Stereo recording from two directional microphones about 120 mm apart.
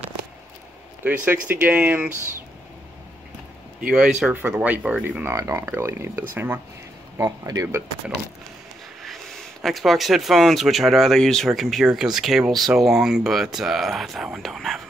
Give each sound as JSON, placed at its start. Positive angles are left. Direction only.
{"t": 1.0, "sound": "speech", "side_deg": -15}
{"t": 3.8, "sound": "speech", "side_deg": -5}
{"t": 7.2, "sound": "speech", "side_deg": -30}
{"t": 9.0, "sound": "speech", "side_deg": 0}